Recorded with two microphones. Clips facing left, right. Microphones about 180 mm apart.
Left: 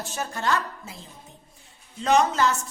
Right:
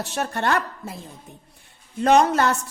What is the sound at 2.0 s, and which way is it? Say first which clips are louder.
Speech: right 4 dB; 60° right (ahead or behind).